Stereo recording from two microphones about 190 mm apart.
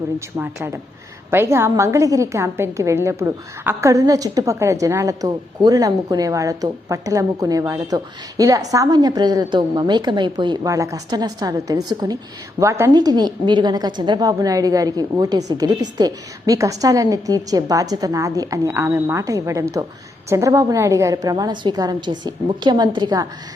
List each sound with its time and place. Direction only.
0.3 s a woman's voice: 10° right (ahead or behind)